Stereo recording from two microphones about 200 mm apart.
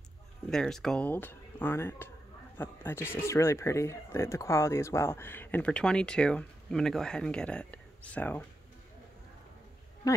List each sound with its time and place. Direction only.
0.5 s speech: centre (ahead or behind)
10.0 s speech: 20° left (ahead or behind)